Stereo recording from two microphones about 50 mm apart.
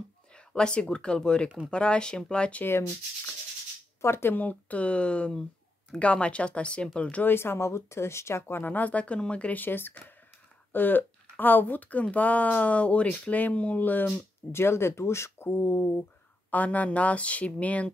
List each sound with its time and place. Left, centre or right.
0.5 s speech: centre
4.0 s speech: left
4.4 s speech: left
7.2 s speech: left
8.5 s speech: left
9.6 s speech: left
14.5 s speech: left
16.4 s speech: left